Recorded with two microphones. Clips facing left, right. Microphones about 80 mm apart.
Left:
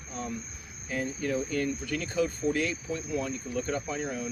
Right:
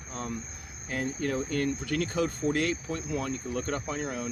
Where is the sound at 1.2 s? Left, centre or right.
Right.